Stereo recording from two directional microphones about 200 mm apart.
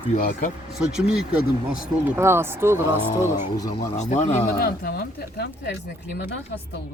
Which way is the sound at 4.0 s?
35° left (ahead or behind).